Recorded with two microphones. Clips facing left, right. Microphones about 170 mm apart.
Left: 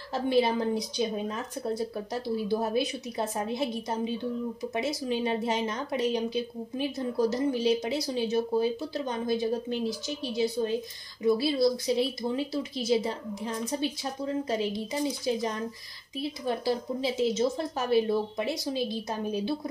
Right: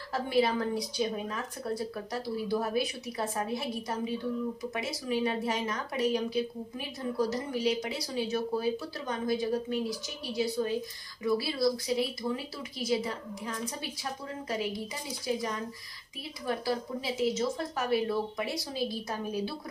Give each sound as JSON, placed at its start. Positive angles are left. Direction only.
{"t": 0.1, "sound": "a woman's voice", "side_deg": 25}